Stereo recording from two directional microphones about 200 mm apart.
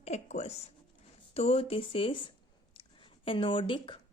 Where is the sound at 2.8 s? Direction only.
25° left (ahead or behind).